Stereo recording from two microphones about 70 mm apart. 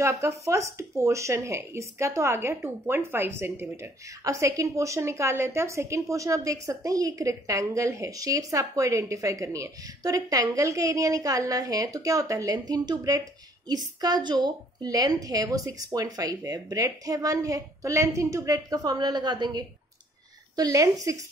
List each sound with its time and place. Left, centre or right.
0.0 s speech: right
4.2 s a woman's voice: right
20.5 s a woman's voice: right